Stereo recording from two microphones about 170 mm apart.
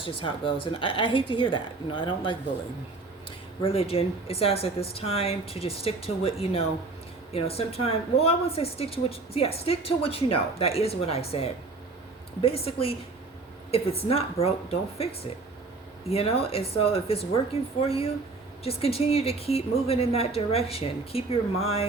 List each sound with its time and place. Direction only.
0.0 s a woman's voice: 30° left (ahead or behind)
3.6 s speech: 35° left (ahead or behind)